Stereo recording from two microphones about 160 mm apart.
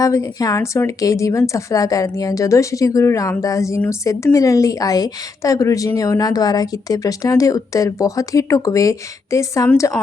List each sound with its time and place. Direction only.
0.0 s speech: 20° left (ahead or behind)